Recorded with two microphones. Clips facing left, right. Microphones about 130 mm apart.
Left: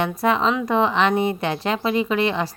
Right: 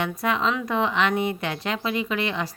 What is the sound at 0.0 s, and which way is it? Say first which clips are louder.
A woman's voice: left 4 dB; 30° left (ahead or behind).